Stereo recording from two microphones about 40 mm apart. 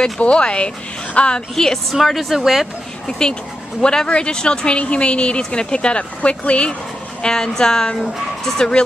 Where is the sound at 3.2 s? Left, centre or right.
Centre.